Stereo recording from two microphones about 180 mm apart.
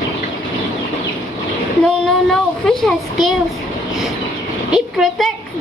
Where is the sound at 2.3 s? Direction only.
Centre (ahead or behind).